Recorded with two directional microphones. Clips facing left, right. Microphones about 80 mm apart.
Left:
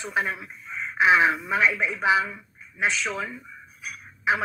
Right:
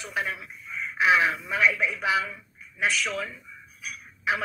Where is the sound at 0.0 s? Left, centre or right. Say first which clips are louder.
Left 4 dB; left.